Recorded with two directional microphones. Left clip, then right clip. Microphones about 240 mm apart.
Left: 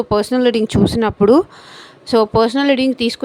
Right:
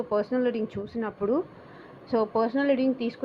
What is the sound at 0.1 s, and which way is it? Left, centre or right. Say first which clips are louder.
Speech: left 11 dB; left.